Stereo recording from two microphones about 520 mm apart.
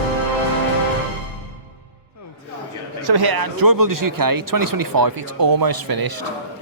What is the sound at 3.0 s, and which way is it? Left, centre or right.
Speech, right.